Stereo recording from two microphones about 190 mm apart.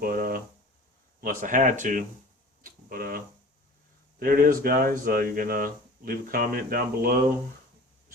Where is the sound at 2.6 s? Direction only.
50° right (ahead or behind).